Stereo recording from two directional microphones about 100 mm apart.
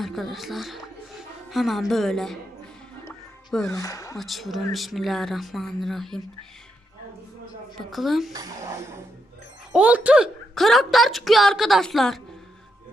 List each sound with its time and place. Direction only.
0.0 s speech: centre (ahead or behind)
3.7 s speech: 35° left (ahead or behind)
4.2 s speech: centre (ahead or behind)
7.8 s speech: centre (ahead or behind)
8.3 s a sound: 40° right (ahead or behind)
9.7 s speech: 15° right (ahead or behind)
10.5 s speech: centre (ahead or behind)